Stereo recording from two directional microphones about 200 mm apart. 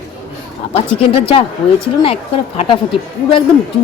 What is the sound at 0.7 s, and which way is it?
Speech, 30° left (ahead or behind).